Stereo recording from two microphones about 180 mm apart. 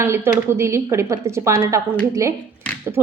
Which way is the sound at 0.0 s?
15° right (ahead or behind).